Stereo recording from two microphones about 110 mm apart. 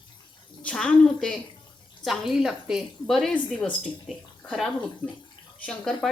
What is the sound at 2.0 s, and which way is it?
Speech, centre (ahead or behind).